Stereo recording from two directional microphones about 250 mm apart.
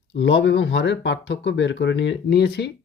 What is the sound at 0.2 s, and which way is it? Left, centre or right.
Speech, left.